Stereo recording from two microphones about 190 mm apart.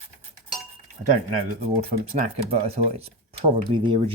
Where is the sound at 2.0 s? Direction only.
35° right (ahead or behind).